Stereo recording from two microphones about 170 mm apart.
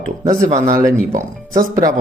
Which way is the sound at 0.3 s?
50° right (ahead or behind).